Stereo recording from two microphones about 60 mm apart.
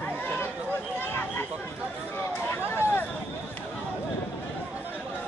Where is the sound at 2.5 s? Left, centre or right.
Left.